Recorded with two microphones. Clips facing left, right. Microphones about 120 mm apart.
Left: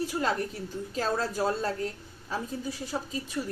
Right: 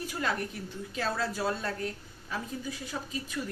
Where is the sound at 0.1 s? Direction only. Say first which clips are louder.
Left 3 dB; 30° left (ahead or behind).